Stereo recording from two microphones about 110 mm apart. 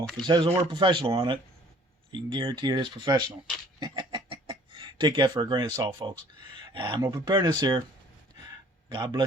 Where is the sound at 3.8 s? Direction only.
45° right (ahead or behind).